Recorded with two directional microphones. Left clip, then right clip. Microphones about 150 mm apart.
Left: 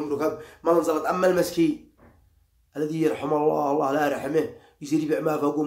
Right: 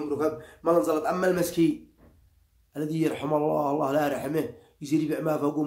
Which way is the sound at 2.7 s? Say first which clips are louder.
Left 3 dB; 15° right (ahead or behind).